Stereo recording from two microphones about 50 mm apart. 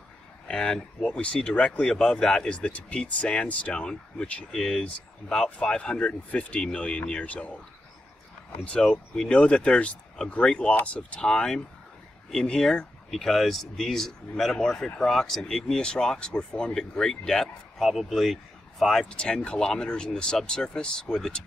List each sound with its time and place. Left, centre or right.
0.5 s speech: centre
4.5 s speech: centre
9.1 s speech: centre
13.1 s speech: centre
17.8 s speech: centre
19.0 s speech: centre